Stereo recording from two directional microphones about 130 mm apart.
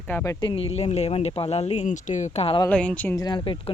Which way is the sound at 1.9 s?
70° left (ahead or behind).